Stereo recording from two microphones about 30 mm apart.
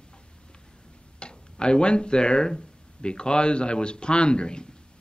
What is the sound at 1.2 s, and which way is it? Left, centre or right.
A man's voice, left.